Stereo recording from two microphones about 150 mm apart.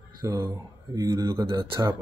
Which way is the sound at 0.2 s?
25° right (ahead or behind).